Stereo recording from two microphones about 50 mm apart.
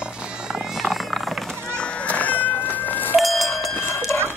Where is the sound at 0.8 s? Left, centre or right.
Centre.